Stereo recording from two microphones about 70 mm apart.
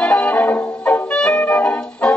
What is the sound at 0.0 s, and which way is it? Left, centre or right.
Music, centre.